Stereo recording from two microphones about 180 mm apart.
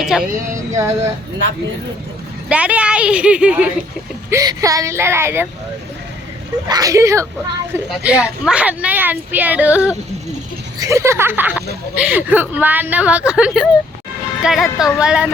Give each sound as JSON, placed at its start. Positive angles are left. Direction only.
{"t": 0.0, "sound": "a sound", "side_deg": -5}
{"t": 0.5, "sound": "speech", "side_deg": -15}
{"t": 2.5, "sound": "speech", "side_deg": -5}
{"t": 4.3, "sound": "speech", "side_deg": -20}
{"t": 6.7, "sound": "speech", "side_deg": -20}
{"t": 7.9, "sound": "speech", "side_deg": -5}